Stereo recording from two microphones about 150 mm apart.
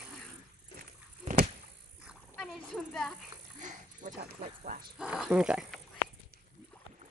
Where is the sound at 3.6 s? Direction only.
55° right (ahead or behind).